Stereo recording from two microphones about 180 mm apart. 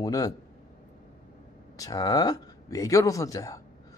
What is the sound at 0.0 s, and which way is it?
Speech, 20° left (ahead or behind).